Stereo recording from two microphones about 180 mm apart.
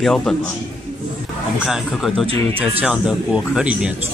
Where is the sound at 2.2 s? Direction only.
30° right (ahead or behind).